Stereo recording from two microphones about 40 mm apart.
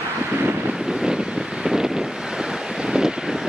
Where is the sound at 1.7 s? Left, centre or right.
Centre.